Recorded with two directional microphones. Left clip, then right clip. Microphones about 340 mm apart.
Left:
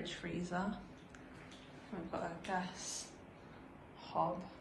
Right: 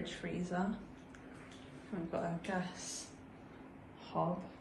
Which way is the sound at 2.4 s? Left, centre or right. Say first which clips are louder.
Even; centre.